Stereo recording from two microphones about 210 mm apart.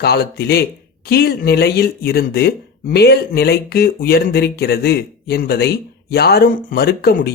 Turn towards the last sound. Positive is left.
turn(degrees=45)  # may be behind; listen again after turning